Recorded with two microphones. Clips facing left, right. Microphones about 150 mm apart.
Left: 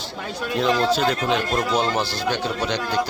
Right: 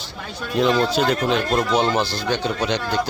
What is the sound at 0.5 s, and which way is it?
Speech, centre (ahead or behind).